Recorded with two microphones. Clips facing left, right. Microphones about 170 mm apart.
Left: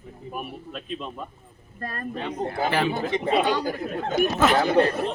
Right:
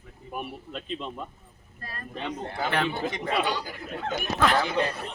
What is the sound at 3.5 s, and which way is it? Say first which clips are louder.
Speech: left 7 dB; 50° left (ahead or behind).